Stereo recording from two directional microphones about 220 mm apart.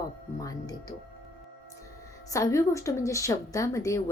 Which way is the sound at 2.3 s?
15° left (ahead or behind).